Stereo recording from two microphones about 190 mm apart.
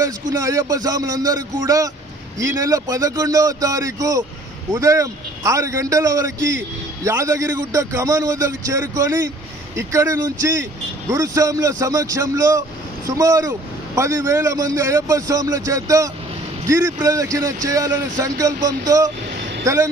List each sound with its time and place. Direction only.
0.4 s a man's voice: 15° right (ahead or behind)